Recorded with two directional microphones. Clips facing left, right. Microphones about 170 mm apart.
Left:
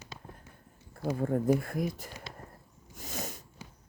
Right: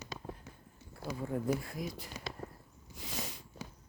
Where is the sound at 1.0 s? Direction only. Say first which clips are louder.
Left 7 dB; 50° left (ahead or behind).